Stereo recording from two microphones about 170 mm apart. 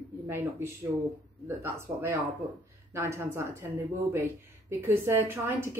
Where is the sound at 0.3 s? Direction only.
15° right (ahead or behind).